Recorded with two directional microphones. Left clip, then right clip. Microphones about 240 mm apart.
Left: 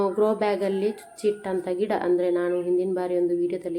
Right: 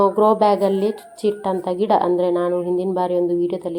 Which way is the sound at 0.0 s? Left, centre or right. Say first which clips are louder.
Right 8 dB; centre.